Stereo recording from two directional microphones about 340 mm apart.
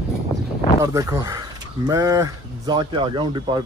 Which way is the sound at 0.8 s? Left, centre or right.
Centre.